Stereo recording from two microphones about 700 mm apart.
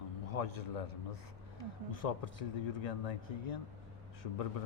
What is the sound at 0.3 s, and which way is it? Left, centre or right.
Speech, left.